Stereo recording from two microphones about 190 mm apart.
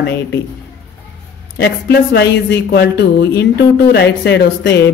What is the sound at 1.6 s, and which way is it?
A woman's voice, 65° left (ahead or behind).